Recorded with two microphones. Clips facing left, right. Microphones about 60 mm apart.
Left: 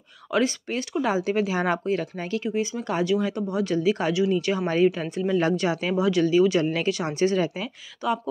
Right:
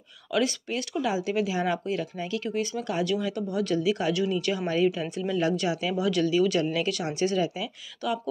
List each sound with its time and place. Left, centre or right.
0.3 s speech: left
2.4 s speech: left
8.0 s speech: left